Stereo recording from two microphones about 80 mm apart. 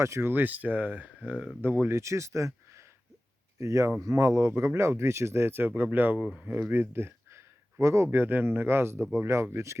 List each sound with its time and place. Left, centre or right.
0.0 s speech: right